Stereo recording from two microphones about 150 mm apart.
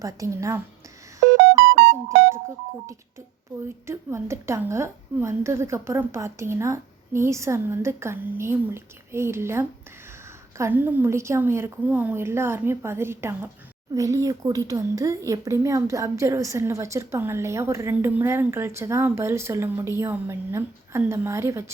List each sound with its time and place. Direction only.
0.0 s speech: 20° right (ahead or behind)
3.8 s a woman's voice: 20° right (ahead or behind)